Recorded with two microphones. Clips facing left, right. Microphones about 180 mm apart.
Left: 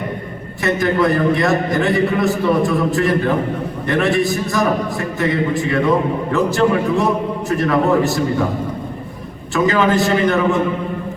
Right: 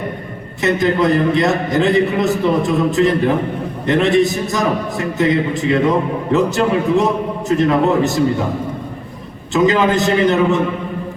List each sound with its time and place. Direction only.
0.6 s a man's voice: 20° right (ahead or behind)
9.5 s a man's voice: 20° right (ahead or behind)